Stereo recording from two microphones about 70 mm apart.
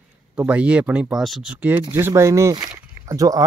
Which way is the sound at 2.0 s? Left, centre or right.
Right.